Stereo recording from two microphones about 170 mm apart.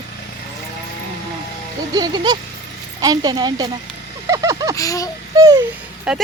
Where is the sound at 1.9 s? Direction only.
25° right (ahead or behind).